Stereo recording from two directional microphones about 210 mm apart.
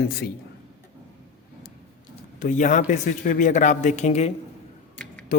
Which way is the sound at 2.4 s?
35° left (ahead or behind).